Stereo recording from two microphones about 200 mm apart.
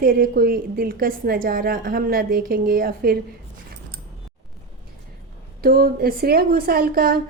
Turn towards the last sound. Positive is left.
turn(degrees=-50)  # may be behind; listen again after turning